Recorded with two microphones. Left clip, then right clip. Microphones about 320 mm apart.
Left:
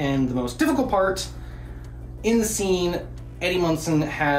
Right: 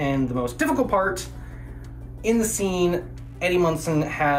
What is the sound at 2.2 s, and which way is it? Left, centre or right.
Speech, centre.